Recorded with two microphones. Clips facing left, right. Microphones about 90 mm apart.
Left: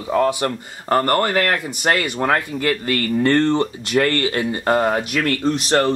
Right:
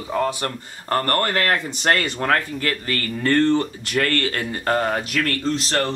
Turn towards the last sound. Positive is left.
turn(degrees=20)  # may be behind; listen again after turning